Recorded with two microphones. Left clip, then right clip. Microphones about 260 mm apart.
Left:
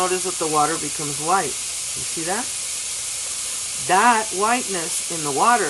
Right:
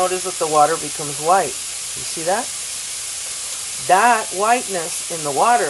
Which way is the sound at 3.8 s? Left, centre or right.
Centre.